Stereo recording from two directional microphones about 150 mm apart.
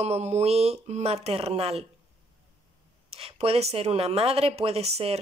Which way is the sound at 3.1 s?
40° right (ahead or behind).